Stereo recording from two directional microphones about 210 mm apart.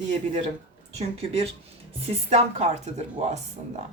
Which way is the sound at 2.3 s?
30° right (ahead or behind).